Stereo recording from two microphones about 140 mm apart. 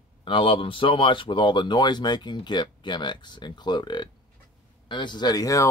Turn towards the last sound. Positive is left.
turn(degrees=25)  # may be behind; listen again after turning